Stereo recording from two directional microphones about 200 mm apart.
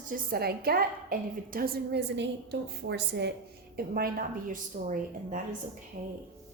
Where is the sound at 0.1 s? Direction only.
50° right (ahead or behind).